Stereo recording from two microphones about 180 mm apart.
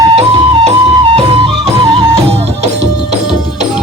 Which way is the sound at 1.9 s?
25° right (ahead or behind).